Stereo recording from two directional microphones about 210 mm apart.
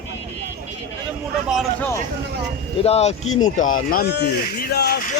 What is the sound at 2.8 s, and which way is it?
Speech, 30° left (ahead or behind).